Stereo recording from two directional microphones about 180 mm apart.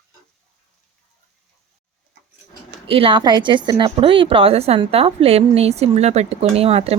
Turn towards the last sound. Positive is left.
turn(degrees=-35)  # may be behind; listen again after turning